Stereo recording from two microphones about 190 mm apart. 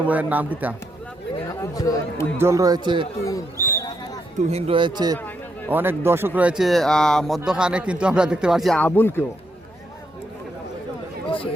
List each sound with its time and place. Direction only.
0.1 s a man's voice: 10° right (ahead or behind)
1.7 s speech: 20° left (ahead or behind)
2.4 s a man's voice: 15° right (ahead or behind)
3.2 s a sound: 15° left (ahead or behind)
4.4 s a man's voice: 35° right (ahead or behind)
5.1 s a sound: 10° left (ahead or behind)
5.7 s speech: 10° right (ahead or behind); by 9.2 s 10° left (ahead or behind)